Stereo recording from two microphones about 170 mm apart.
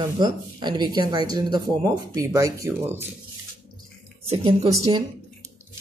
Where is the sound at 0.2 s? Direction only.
25° right (ahead or behind).